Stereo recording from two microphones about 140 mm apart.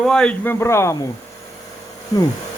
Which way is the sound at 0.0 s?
5° left (ahead or behind).